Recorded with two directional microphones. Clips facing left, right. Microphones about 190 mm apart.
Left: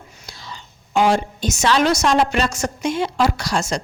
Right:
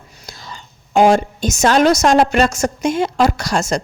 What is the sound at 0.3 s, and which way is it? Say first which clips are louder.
A woman's voice: right 3 dB; 45° right (ahead or behind).